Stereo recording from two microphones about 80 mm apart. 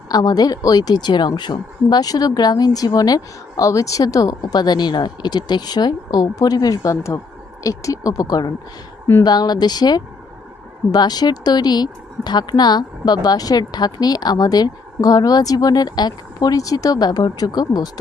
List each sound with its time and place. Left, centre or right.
0.1 s speech: left
3.6 s speech: left
6.9 s speech: left